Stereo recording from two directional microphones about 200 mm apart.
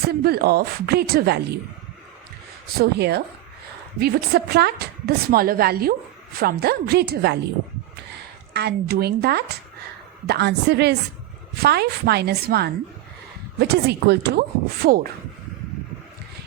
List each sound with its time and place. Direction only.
0.1 s a woman's voice: 50° right (ahead or behind)
2.6 s a woman's voice: 50° right (ahead or behind)
8.5 s a woman's voice: 55° right (ahead or behind)